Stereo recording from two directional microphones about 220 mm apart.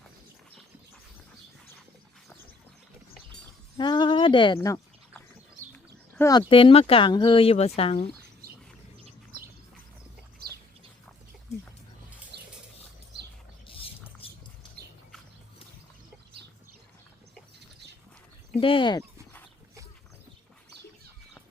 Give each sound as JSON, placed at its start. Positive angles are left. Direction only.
{"t": 3.8, "sound": "a sound", "side_deg": 20}
{"t": 5.7, "sound": "speech", "side_deg": 10}
{"t": 10.4, "sound": "bird", "side_deg": -45}
{"t": 13.7, "sound": "rodents", "side_deg": 25}
{"t": 18.6, "sound": "speech", "side_deg": 25}